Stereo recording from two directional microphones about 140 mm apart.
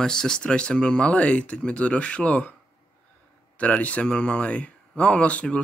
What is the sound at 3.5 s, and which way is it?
Speech, 10° left (ahead or behind).